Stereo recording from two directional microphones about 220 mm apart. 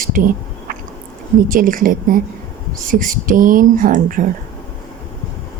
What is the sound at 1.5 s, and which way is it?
A woman's voice, 40° right (ahead or behind).